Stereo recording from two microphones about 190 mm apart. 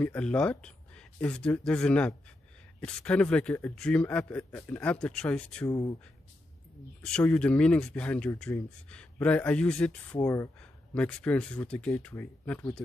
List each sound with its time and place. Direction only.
0.0 s a man's voice: 5° left (ahead or behind)
5.7 s speech: 20° left (ahead or behind)
7.1 s speech: 5° left (ahead or behind)